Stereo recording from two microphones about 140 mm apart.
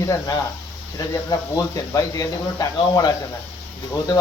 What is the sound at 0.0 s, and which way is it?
Speech, 25° left (ahead or behind).